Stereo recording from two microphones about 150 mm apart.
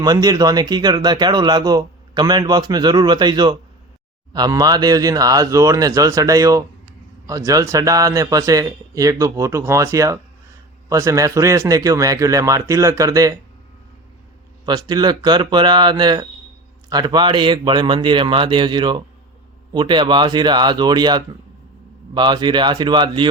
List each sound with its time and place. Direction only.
0.0 s speech: 25° right (ahead or behind)
14.7 s a man's voice: 25° right (ahead or behind)